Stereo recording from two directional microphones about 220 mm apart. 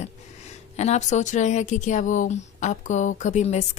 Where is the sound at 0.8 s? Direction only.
30° left (ahead or behind).